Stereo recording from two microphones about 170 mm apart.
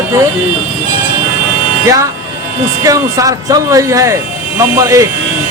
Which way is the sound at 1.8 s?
20° right (ahead or behind).